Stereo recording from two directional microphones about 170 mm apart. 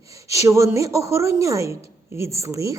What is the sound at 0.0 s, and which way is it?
A woman's voice, 20° right (ahead or behind).